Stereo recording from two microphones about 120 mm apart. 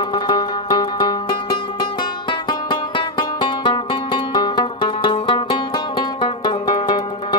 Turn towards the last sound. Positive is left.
turn(degrees=40)  # may be behind; listen again after turning